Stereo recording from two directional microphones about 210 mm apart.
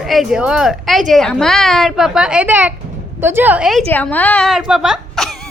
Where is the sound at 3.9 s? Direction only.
5° left (ahead or behind).